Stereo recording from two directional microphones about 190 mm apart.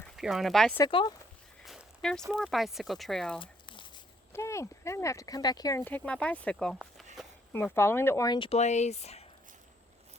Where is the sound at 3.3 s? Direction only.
25° left (ahead or behind).